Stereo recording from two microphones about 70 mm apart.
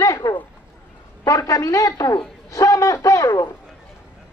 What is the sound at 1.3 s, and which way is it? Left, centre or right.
A man's voice, left.